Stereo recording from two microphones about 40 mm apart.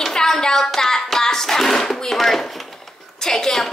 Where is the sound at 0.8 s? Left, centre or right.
Centre.